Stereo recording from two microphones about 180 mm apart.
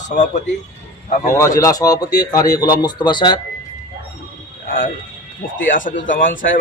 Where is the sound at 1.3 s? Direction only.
15° left (ahead or behind).